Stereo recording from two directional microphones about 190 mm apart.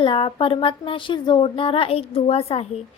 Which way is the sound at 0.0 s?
25° left (ahead or behind).